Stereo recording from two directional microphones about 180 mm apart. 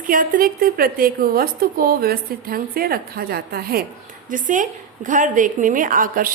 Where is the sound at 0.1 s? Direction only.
50° right (ahead or behind).